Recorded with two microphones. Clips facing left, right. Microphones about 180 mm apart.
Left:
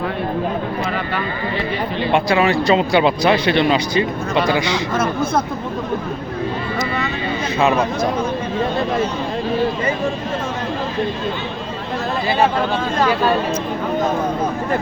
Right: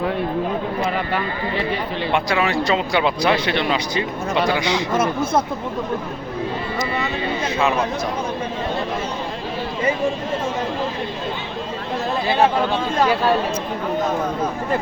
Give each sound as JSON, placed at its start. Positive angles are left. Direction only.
{"t": 2.1, "sound": "speech", "side_deg": 30}